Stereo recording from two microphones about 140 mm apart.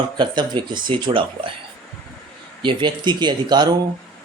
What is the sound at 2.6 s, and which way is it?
Speech, 35° right (ahead or behind).